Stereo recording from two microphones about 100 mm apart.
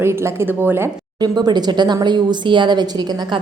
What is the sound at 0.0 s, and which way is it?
Speech, 25° right (ahead or behind).